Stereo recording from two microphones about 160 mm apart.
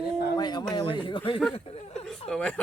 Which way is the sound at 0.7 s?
30° left (ahead or behind).